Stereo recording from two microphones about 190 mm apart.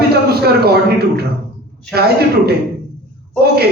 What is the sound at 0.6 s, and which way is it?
Speech, 55° right (ahead or behind).